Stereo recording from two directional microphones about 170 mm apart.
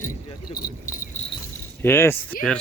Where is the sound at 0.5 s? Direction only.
55° left (ahead or behind).